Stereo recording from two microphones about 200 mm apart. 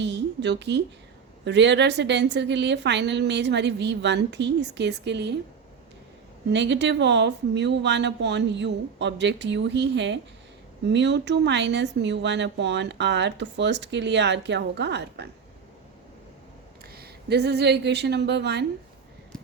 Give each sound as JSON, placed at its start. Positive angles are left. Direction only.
{"t": 0.0, "sound": "a woman's voice", "side_deg": -60}
{"t": 6.5, "sound": "speech", "side_deg": -60}
{"t": 16.9, "sound": "a woman's voice", "side_deg": -55}